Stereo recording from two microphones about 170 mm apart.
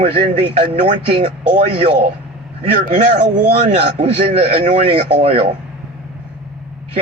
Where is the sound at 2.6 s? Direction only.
40° right (ahead or behind).